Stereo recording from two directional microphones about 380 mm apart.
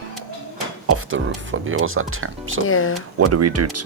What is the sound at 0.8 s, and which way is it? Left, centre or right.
Speech, right.